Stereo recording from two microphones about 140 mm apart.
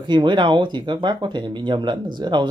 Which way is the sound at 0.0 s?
35° right (ahead or behind).